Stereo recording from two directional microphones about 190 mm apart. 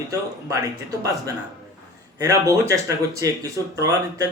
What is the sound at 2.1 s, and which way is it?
Speech, 15° right (ahead or behind).